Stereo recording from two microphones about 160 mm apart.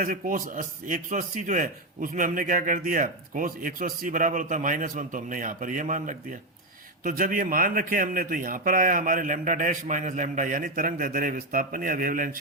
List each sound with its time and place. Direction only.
0.0 s a man's voice: 60° right (ahead or behind)